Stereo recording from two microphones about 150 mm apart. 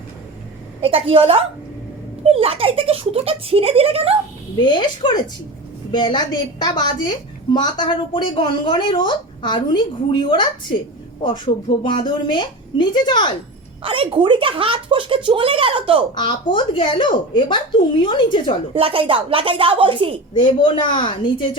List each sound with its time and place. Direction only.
0.8 s speech: 40° right (ahead or behind)
4.6 s a woman's voice: 30° left (ahead or behind)
13.8 s speech: 35° right (ahead or behind)
16.1 s a woman's voice: 30° left (ahead or behind)
18.7 s speech: 40° right (ahead or behind)
20.4 s a woman's voice: 35° left (ahead or behind)